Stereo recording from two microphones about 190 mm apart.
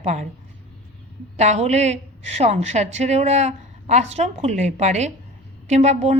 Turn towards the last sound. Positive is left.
turn(degrees=-35)  # may be behind; listen again after turning